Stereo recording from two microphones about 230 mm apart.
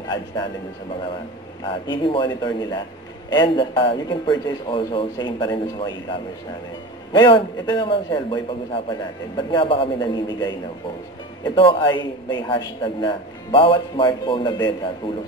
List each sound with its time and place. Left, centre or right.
1.9 s a man's voice: left